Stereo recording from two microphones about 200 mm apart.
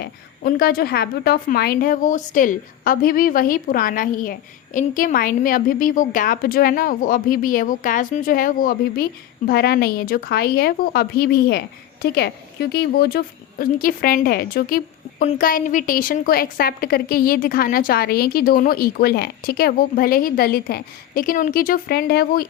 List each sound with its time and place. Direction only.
0.0 s a woman's voice: 50° left (ahead or behind)